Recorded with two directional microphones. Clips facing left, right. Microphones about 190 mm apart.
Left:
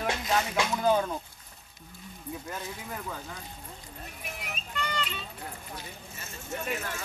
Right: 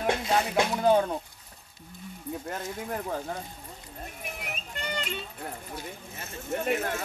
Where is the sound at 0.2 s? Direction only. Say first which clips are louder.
Right 2 dB; 30° right (ahead or behind).